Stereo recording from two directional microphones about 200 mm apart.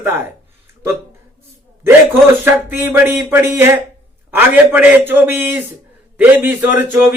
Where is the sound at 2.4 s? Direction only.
10° right (ahead or behind).